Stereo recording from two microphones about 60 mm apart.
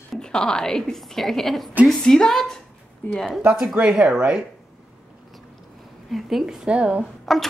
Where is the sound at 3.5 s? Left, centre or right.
Centre.